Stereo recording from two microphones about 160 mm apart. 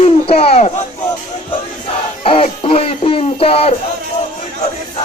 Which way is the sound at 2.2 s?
35° left (ahead or behind).